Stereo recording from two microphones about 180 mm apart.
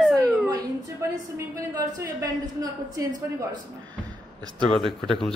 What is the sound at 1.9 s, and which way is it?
A woman's voice, 20° right (ahead or behind).